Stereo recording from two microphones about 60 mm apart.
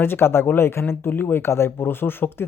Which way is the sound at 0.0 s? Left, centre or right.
Left.